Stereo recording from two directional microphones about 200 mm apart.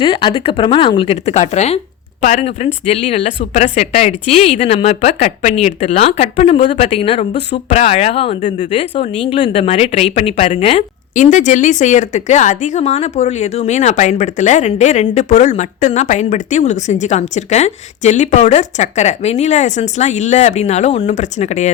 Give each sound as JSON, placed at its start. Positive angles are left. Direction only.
{"t": 0.0, "sound": "speech", "side_deg": 25}